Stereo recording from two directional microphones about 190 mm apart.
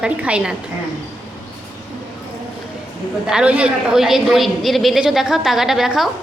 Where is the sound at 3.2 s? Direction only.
5° right (ahead or behind).